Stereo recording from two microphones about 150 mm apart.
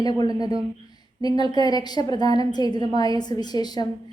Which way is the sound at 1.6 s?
25° left (ahead or behind).